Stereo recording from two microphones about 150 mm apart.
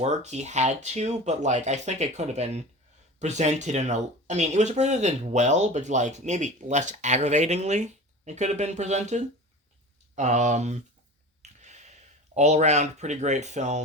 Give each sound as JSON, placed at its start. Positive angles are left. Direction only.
{"t": 0.0, "sound": "speech", "side_deg": -50}